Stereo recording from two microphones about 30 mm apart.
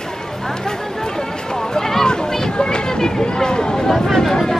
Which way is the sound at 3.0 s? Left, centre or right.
Left.